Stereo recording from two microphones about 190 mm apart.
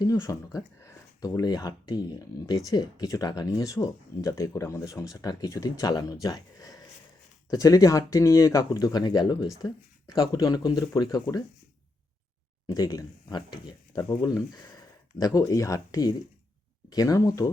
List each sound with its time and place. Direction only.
0.0 s speech: 15° left (ahead or behind)
12.6 s speech: 20° left (ahead or behind)